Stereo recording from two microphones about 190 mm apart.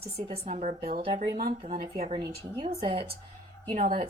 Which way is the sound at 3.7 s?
40° right (ahead or behind).